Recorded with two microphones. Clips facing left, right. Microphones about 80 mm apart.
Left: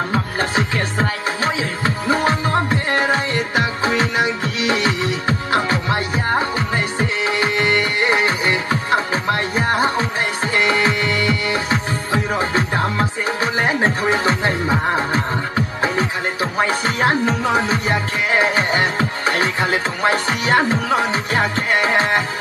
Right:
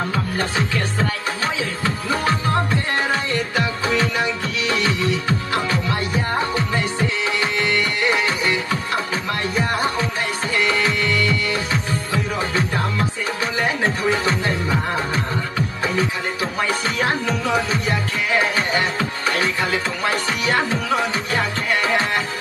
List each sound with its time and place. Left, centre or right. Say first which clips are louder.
0.1 s music: left 3 dB; left